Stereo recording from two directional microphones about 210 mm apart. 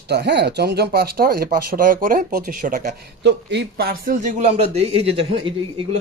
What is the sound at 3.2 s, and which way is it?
A man's voice, 55° right (ahead or behind).